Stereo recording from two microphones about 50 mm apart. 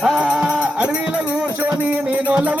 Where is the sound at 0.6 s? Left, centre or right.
Right.